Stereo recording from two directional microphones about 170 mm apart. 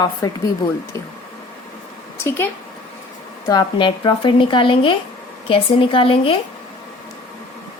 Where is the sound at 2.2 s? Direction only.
15° left (ahead or behind).